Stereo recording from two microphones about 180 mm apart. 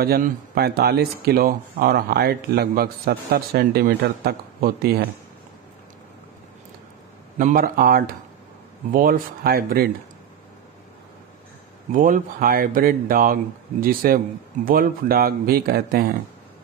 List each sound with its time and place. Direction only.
0.0 s speech: 60° right (ahead or behind)
7.3 s speech: 50° right (ahead or behind)
11.9 s speech: 50° right (ahead or behind)